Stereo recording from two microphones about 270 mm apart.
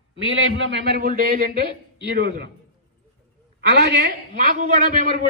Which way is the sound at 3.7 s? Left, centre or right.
Right.